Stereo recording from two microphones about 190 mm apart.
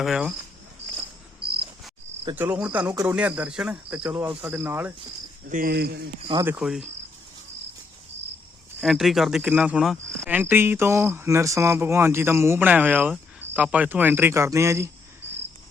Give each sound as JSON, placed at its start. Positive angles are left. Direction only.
{"t": 0.0, "sound": "speech", "side_deg": -5}
{"t": 1.4, "sound": "cricket", "side_deg": -55}
{"t": 2.3, "sound": "speech", "side_deg": -10}
{"t": 5.5, "sound": "speech", "side_deg": -50}
{"t": 6.4, "sound": "speech", "side_deg": -5}
{"t": 8.8, "sound": "speech", "side_deg": 0}